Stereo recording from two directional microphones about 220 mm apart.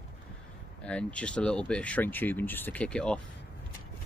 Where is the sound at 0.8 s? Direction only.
5° left (ahead or behind).